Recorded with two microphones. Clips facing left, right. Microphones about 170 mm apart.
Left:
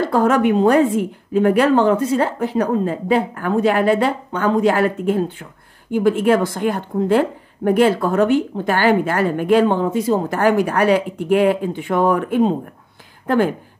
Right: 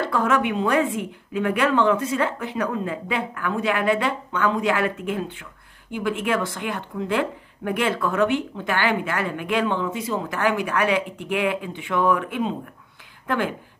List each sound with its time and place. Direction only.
0.0 s a woman's voice: 40° left (ahead or behind)